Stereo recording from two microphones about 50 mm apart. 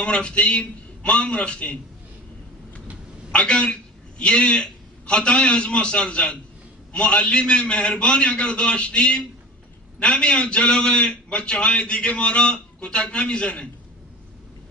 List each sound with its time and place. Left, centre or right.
0.0 s a man's voice: left
3.3 s a man's voice: centre